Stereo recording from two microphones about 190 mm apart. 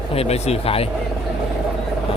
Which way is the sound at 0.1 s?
30° left (ahead or behind).